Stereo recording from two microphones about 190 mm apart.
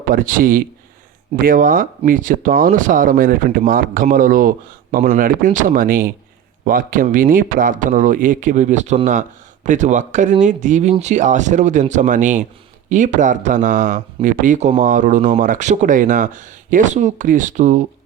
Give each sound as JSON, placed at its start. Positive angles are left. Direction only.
{"t": 0.1, "sound": "speech", "side_deg": -45}